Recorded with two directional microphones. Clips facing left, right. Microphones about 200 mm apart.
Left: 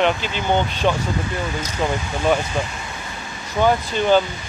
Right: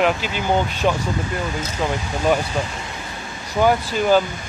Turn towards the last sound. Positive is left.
turn(degrees=-5)  # may be behind; listen again after turning